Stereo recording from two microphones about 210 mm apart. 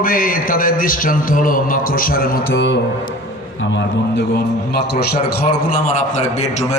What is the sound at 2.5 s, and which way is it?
A man's voice, 60° left (ahead or behind).